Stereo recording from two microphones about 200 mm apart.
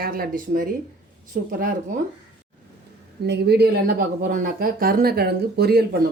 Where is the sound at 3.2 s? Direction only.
55° right (ahead or behind).